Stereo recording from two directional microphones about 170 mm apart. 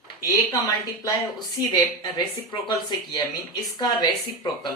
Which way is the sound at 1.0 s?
25° left (ahead or behind).